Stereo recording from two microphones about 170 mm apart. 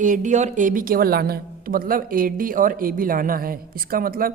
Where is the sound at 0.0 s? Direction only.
50° right (ahead or behind).